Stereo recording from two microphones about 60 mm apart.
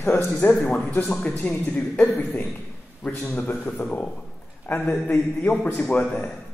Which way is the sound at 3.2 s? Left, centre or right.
Left.